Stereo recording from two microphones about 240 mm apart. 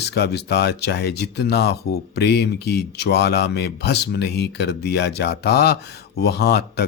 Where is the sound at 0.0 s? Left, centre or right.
Left.